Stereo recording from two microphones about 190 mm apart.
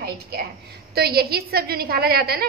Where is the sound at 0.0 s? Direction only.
55° right (ahead or behind).